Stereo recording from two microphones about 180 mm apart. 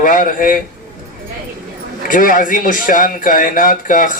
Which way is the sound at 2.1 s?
50° left (ahead or behind).